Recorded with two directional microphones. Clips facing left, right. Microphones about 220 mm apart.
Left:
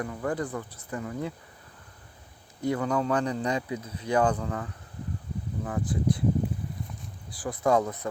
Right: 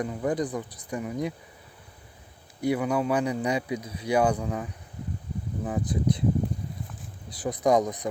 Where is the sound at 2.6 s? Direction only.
10° right (ahead or behind).